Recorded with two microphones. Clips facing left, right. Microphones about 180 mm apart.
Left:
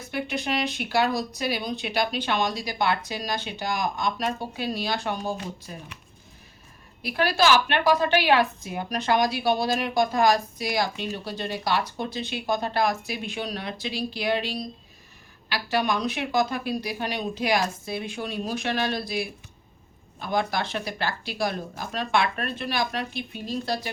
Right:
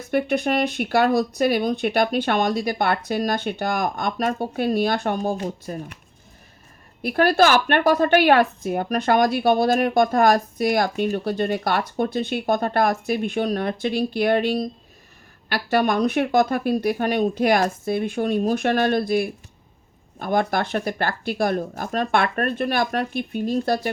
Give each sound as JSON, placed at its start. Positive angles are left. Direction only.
{"t": 0.1, "sound": "a woman's voice", "side_deg": -55}
{"t": 7.0, "sound": "a woman's voice", "side_deg": -50}